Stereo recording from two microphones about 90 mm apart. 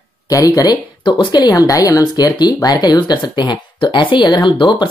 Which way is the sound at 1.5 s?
40° left (ahead or behind).